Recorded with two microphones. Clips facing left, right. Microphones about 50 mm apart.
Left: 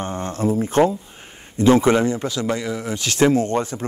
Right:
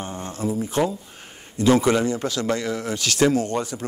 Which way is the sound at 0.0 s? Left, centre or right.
Left.